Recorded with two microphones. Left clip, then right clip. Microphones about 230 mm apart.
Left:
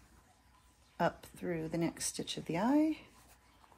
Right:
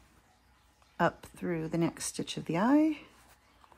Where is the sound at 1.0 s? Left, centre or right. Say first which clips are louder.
Right 4 dB; right.